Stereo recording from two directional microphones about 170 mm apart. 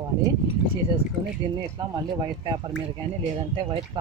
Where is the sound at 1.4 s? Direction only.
30° right (ahead or behind).